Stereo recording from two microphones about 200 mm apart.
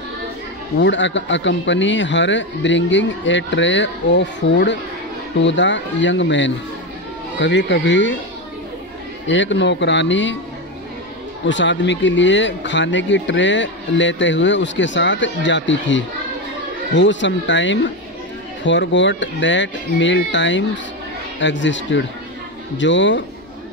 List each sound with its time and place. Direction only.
0.7 s speech: 65° left (ahead or behind)
9.3 s speech: 65° left (ahead or behind)
11.4 s speech: 65° left (ahead or behind)